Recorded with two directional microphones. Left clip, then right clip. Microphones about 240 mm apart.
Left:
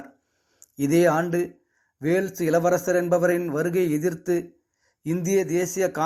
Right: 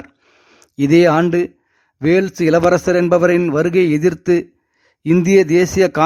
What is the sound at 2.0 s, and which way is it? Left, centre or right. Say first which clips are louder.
A man's voice: right 9 dB; right.